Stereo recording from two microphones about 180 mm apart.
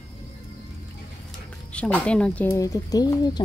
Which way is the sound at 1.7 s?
5° left (ahead or behind).